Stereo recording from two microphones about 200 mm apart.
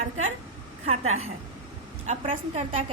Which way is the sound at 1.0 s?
90° right.